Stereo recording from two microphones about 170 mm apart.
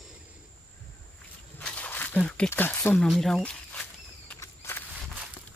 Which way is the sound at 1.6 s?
10° left (ahead or behind).